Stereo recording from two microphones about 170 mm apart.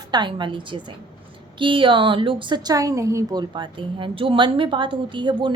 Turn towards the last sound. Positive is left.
turn(degrees=-30)  # may be behind; listen again after turning